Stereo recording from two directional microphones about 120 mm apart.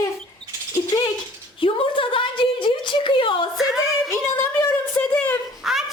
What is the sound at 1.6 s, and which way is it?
A woman's voice, 45° left (ahead or behind).